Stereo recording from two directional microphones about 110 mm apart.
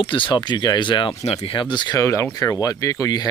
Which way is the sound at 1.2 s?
65° left (ahead or behind).